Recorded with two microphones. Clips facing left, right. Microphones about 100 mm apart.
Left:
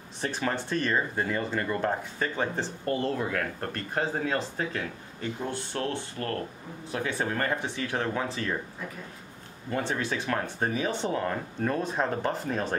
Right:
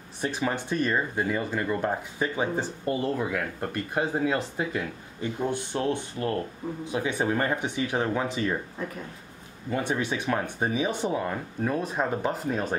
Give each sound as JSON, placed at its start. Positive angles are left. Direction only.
{"t": 0.2, "sound": "speech", "side_deg": -5}
{"t": 9.7, "sound": "speech", "side_deg": -10}